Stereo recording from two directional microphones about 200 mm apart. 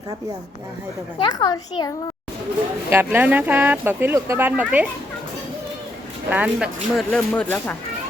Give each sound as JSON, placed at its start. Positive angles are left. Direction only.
{"t": 1.2, "sound": "a child's voice", "side_deg": 20}
{"t": 2.9, "sound": "speech", "side_deg": -10}
{"t": 6.3, "sound": "speech", "side_deg": -5}